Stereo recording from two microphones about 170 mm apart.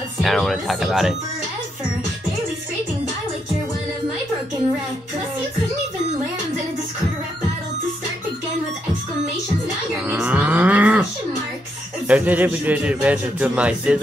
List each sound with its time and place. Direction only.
0.2 s speech: centre (ahead or behind)
10.0 s livestock: 10° right (ahead or behind)
12.1 s a man's voice: 10° right (ahead or behind)